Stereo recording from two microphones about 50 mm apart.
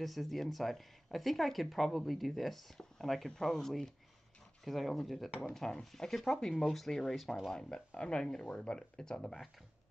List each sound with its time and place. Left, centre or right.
0.0 s speech: centre
7.9 s speech: left